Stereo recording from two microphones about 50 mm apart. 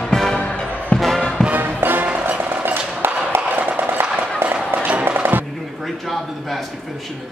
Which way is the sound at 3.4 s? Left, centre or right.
Right.